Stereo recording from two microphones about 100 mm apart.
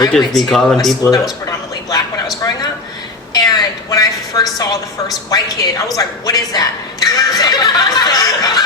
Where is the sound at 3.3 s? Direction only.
40° left (ahead or behind).